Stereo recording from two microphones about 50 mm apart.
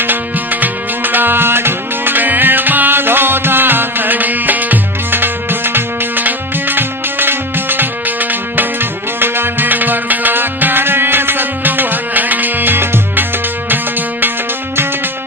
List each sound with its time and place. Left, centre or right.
0.0 s music: right